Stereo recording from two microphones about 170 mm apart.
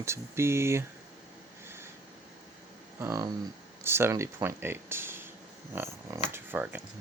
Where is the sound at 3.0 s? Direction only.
20° right (ahead or behind).